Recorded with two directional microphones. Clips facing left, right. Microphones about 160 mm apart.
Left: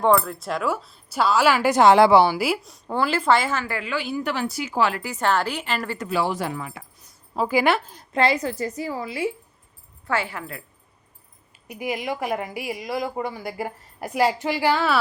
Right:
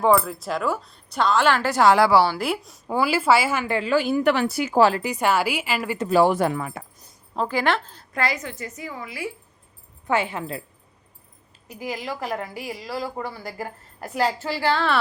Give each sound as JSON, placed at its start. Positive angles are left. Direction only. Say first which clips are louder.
{"t": 0.0, "sound": "speech", "louder": "even", "side_deg": 0}
{"t": 1.7, "sound": "a woman's voice", "louder": "left 3 dB", "side_deg": 20}
{"t": 2.4, "sound": "a woman's voice", "louder": "left 2 dB", "side_deg": 0}
{"t": 3.9, "sound": "speech", "louder": "right 7 dB", "side_deg": -55}
{"t": 4.8, "sound": "speech", "louder": "right 5 dB", "side_deg": -35}
{"t": 5.0, "sound": "a woman's voice", "louder": "right 1 dB", "side_deg": -10}
{"t": 6.1, "sound": "speech", "louder": "right 7 dB", "side_deg": -45}
{"t": 7.3, "sound": "a woman's voice", "louder": "left 2 dB", "side_deg": 10}
{"t": 8.1, "sound": "a woman's voice", "louder": "left 5 dB", "side_deg": 30}
{"t": 10.1, "sound": "a woman's voice", "louder": "right 3 dB", "side_deg": -20}
{"t": 11.7, "sound": "a woman's voice", "louder": "left 3 dB", "side_deg": 15}